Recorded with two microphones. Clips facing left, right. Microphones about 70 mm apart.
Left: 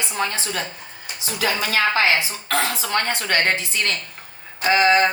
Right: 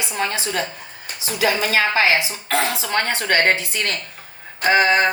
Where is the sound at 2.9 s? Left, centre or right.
Right.